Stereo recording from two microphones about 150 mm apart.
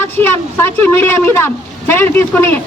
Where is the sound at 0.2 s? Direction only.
15° left (ahead or behind).